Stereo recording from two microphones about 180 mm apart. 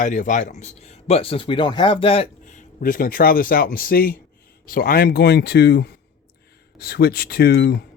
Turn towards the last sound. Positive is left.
turn(degrees=60)  # may be behind; listen again after turning